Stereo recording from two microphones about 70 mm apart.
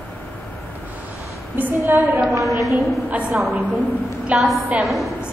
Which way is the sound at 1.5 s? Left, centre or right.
Right.